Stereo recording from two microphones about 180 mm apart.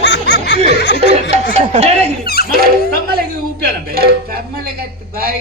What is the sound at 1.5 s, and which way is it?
Speech, 40° right (ahead or behind).